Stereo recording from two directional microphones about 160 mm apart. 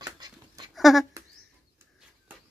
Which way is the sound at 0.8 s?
Centre (ahead or behind).